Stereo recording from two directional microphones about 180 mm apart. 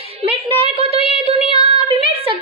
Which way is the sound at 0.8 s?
30° left (ahead or behind).